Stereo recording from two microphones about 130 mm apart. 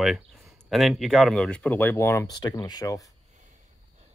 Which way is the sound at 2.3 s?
30° left (ahead or behind).